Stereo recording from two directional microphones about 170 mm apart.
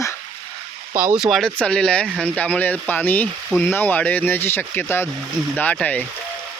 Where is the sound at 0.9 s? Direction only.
10° right (ahead or behind); by 6.0 s 10° left (ahead or behind).